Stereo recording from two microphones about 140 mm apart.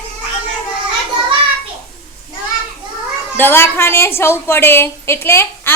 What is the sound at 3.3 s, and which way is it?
A woman's voice, 15° left (ahead or behind).